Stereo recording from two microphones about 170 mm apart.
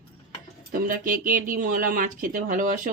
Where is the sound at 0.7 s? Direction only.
55° right (ahead or behind).